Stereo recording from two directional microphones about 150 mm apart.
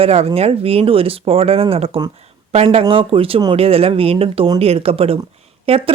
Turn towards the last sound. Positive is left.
turn(degrees=-40)  # may be behind; listen again after turning